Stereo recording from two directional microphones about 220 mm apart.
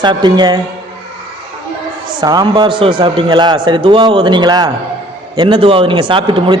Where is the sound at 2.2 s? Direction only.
20° right (ahead or behind).